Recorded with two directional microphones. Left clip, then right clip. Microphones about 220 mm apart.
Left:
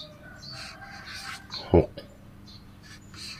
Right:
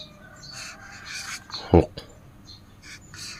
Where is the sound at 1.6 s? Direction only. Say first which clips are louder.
Right 3 dB; 40° right (ahead or behind).